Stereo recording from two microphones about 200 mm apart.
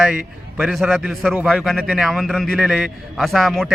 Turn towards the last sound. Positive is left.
turn(degrees=0)  # may be behind; listen again after turning